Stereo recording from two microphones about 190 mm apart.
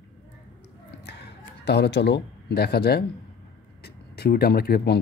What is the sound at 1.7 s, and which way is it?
A man's voice, 65° left (ahead or behind).